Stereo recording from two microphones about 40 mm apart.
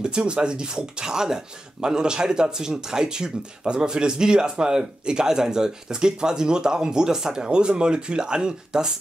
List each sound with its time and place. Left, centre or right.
0.0 s speech: right
7.4 s speech: right